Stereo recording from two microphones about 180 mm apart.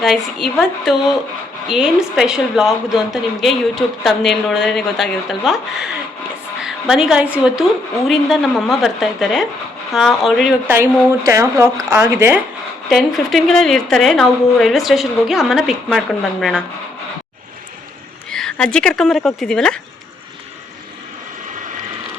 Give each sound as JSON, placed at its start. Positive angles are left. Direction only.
{"t": 0.0, "sound": "a woman's voice", "side_deg": 0}
{"t": 10.7, "sound": "speech", "side_deg": -15}
{"t": 12.9, "sound": "a woman's voice", "side_deg": 0}
{"t": 18.3, "sound": "speech", "side_deg": 5}